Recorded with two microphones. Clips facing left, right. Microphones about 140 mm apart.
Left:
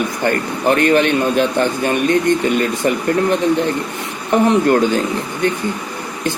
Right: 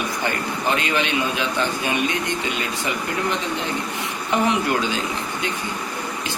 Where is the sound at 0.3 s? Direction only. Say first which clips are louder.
Left 8 dB; 55° left (ahead or behind).